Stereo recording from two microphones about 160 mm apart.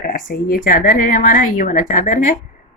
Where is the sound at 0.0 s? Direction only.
60° left (ahead or behind).